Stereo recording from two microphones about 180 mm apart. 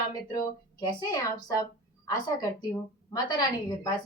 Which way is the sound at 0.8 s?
20° left (ahead or behind).